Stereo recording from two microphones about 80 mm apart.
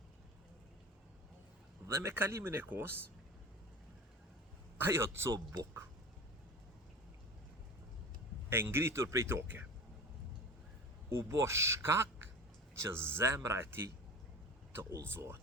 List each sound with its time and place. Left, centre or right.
1.9 s speech: right
4.9 s speech: right
8.4 s speech: right
11.1 s speech: right